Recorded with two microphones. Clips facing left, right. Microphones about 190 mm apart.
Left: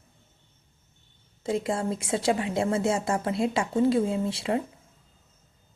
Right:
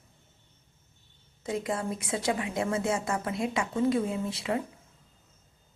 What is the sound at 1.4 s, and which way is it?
Speech, 30° left (ahead or behind).